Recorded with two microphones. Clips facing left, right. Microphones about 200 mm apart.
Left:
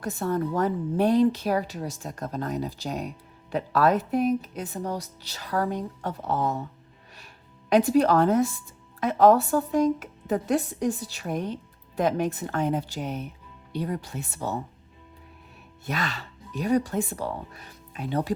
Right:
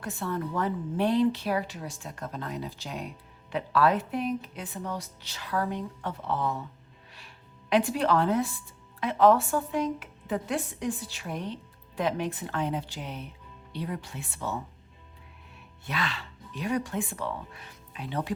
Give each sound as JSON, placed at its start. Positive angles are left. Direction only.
{"t": 0.0, "sound": "speech", "side_deg": 40}
{"t": 7.7, "sound": "a woman's voice", "side_deg": 40}
{"t": 15.9, "sound": "speech", "side_deg": 40}